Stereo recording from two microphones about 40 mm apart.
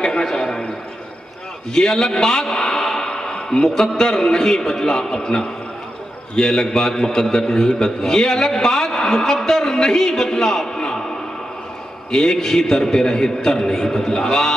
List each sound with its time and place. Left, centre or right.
0.0 s a sound: centre
1.7 s a man's voice: centre
3.1 s a man's voice: left
12.1 s a man's voice: centre